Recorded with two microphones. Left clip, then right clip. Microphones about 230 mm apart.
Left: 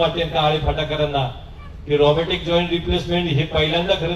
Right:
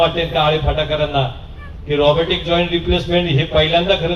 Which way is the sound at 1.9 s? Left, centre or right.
Right.